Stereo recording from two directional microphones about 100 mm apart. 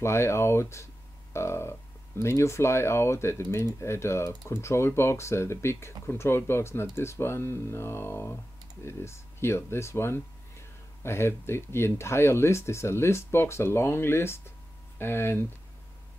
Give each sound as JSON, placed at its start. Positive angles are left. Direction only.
{"t": 0.0, "sound": "speech", "side_deg": 25}